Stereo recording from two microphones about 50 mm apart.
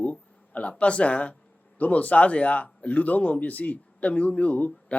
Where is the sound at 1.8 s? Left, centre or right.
Left.